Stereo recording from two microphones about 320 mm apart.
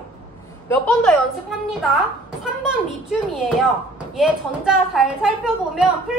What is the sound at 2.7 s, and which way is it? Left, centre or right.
A woman's voice, centre.